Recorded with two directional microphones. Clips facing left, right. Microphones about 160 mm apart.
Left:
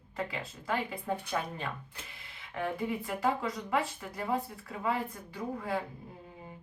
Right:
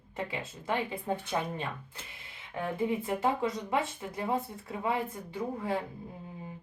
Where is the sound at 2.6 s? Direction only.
20° right (ahead or behind).